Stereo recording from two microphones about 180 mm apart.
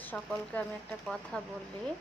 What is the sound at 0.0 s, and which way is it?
Speech, 10° left (ahead or behind).